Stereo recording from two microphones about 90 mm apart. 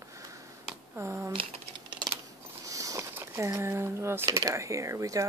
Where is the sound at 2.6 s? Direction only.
40° right (ahead or behind).